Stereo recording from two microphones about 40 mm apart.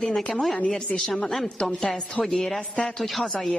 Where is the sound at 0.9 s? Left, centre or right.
Left.